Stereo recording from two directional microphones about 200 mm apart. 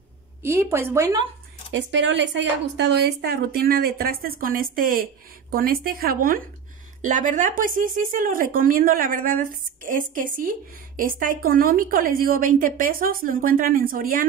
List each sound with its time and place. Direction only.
0.4 s a woman's voice: 10° right (ahead or behind)
1.7 s speech: 65° right (ahead or behind); by 14.2 s 45° right (ahead or behind)